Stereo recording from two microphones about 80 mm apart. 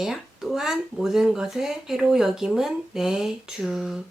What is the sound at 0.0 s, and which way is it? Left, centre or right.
Speech, centre.